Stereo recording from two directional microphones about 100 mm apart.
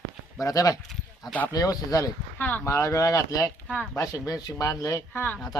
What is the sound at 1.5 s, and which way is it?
Speech, 40° left (ahead or behind).